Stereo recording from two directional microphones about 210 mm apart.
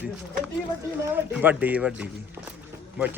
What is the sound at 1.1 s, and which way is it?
Speech, 10° right (ahead or behind).